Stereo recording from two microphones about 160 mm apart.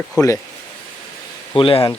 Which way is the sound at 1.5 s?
35° left (ahead or behind).